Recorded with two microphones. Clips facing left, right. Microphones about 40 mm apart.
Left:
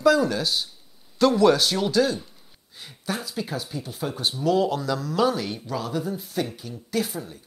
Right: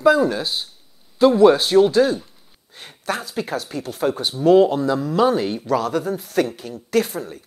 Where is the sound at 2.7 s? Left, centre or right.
Right.